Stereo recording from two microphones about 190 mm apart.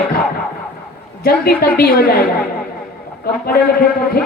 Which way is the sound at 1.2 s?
55° left (ahead or behind).